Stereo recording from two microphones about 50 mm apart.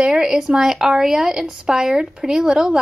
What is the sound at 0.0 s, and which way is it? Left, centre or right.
A woman's voice, centre.